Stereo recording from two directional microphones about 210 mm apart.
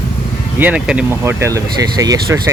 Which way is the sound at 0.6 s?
5° right (ahead or behind).